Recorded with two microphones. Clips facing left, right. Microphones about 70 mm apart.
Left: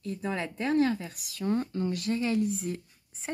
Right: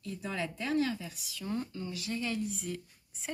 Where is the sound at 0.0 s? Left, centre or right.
Left.